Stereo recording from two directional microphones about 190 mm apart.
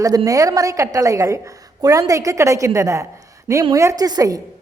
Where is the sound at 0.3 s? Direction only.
20° right (ahead or behind).